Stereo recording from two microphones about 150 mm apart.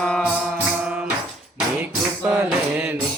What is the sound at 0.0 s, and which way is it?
Music, 5° left (ahead or behind).